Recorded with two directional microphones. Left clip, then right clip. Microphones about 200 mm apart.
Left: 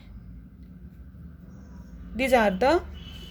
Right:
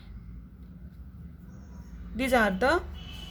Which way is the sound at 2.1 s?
20° left (ahead or behind).